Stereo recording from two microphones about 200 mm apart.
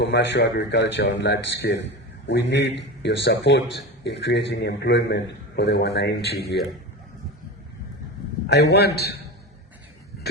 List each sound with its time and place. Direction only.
0.0 s a man's voice: 60° left (ahead or behind)
8.4 s a man's voice: 55° left (ahead or behind)